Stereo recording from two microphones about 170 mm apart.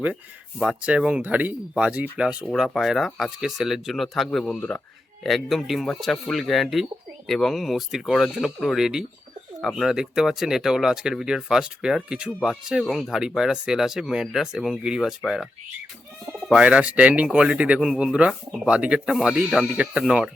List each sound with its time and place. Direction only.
0.6 s speech: 5° right (ahead or behind)
2.4 s speech: 5° left (ahead or behind)
16.5 s speech: 5° right (ahead or behind)